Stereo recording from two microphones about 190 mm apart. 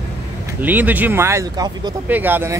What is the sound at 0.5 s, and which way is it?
Speech, 10° right (ahead or behind).